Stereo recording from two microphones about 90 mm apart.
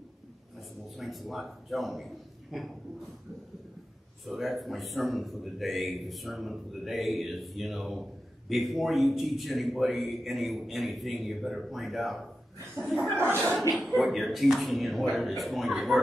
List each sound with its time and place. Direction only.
0.6 s a man's voice: centre (ahead or behind)
4.2 s a man's voice: centre (ahead or behind)
13.2 s speech: 25° right (ahead or behind)
13.9 s a man's voice: centre (ahead or behind)